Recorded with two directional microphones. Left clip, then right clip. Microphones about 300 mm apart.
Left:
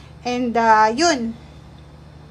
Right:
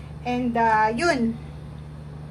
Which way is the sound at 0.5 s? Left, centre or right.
Centre.